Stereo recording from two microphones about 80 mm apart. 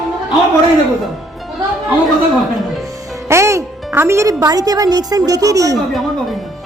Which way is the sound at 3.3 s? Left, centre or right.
Right.